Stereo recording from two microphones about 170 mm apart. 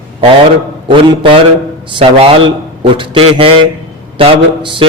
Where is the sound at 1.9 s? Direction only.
30° right (ahead or behind).